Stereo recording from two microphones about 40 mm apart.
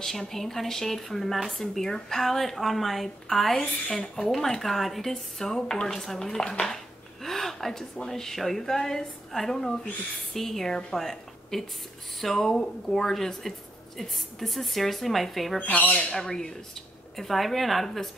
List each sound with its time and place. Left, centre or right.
0.0 s a woman's voice: centre
15.6 s speech: left
16.1 s a woman's voice: centre